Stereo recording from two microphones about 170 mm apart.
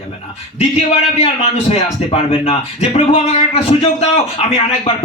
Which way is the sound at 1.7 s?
35° left (ahead or behind).